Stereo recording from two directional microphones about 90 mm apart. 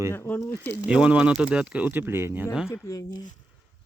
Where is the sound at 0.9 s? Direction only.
15° right (ahead or behind).